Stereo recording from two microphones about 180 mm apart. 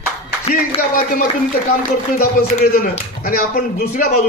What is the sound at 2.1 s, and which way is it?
Speech, 55° left (ahead or behind).